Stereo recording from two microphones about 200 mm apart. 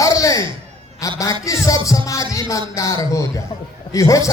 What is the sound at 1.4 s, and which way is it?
Music, 15° left (ahead or behind).